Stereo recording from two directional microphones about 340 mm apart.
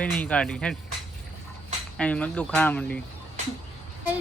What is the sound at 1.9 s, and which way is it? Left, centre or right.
Speech, centre.